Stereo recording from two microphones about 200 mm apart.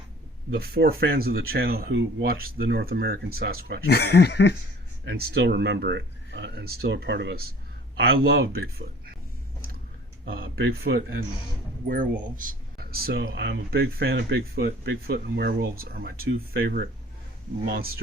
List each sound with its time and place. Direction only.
0.5 s speech: 50° right (ahead or behind)
3.8 s speech: 55° left (ahead or behind)
5.0 s speech: 55° right (ahead or behind)
10.2 s speech: 50° right (ahead or behind)
12.2 s speech: 45° right (ahead or behind)